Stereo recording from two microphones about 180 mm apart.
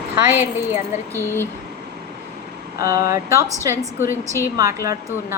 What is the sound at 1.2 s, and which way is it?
Speech, 10° left (ahead or behind).